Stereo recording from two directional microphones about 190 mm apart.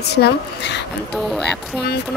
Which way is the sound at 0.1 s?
60° left (ahead or behind).